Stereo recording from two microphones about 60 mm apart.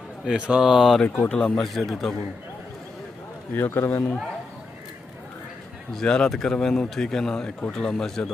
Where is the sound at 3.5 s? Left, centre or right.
Left.